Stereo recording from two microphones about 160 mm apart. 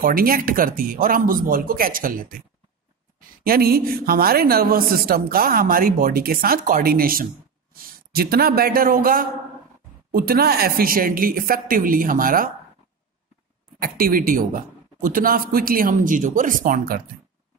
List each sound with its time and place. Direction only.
0.0 s a man's voice: 65° right (ahead or behind)
13.7 s a man's voice: 65° right (ahead or behind)